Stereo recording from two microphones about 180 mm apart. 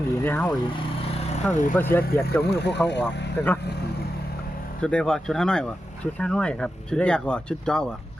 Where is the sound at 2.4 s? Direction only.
70° left (ahead or behind).